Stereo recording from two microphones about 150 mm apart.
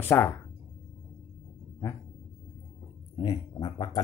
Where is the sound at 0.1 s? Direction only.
15° left (ahead or behind).